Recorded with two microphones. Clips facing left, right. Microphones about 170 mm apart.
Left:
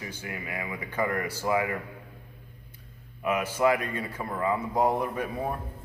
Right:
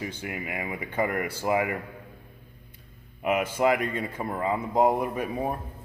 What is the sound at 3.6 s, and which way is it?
A man's voice, 20° right (ahead or behind).